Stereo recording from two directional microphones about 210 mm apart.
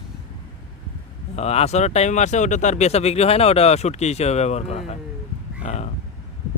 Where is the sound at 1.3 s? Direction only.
30° left (ahead or behind).